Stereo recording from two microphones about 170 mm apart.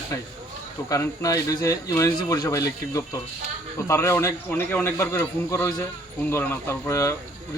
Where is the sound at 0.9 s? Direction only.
20° left (ahead or behind).